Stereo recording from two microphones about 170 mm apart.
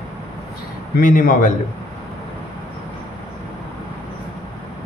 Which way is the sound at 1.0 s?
55° left (ahead or behind).